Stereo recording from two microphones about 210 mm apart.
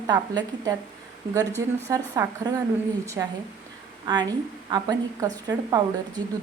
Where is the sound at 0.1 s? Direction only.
15° right (ahead or behind).